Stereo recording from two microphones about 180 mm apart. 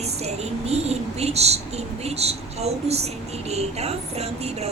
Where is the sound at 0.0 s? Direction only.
35° right (ahead or behind).